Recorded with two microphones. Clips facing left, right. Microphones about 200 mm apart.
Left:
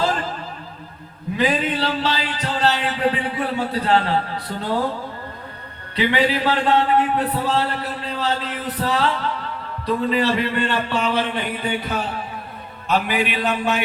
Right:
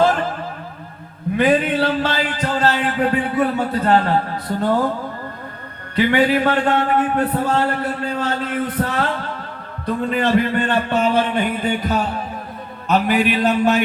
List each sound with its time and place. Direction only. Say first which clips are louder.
1.4 s a man's voice: right 5 dB; 55° right (ahead or behind)
6.0 s a man's voice: right 4 dB; 50° right (ahead or behind)